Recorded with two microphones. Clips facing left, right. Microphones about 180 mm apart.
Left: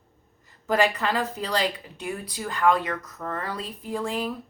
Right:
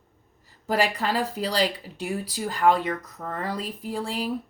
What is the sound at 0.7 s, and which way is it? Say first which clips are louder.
Speech: left 1 dB; 35° right (ahead or behind).